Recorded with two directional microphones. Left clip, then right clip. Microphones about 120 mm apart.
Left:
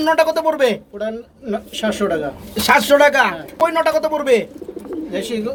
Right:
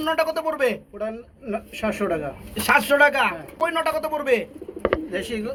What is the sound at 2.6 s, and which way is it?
Speech, 45° left (ahead or behind).